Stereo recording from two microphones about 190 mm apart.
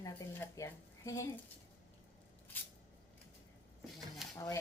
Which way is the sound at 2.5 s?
10° left (ahead or behind).